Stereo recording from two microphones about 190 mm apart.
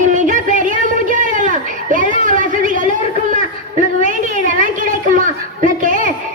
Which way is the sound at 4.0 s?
40° right (ahead or behind).